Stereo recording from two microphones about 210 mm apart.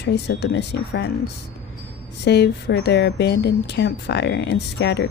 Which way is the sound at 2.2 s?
55° left (ahead or behind).